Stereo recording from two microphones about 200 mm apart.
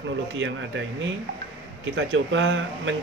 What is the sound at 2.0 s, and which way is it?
Speech, 70° right (ahead or behind).